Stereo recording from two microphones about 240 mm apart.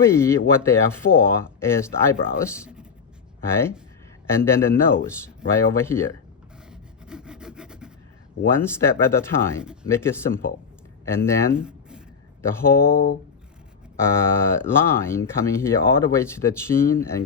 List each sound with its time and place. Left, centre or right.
0.0 s speech: centre
2.6 s speech: centre
3.4 s speech: centre
6.7 s rub: centre
8.4 s speech: centre
11.5 s a sound: centre
12.4 s speech: centre
12.8 s speech: left
14.0 s speech: centre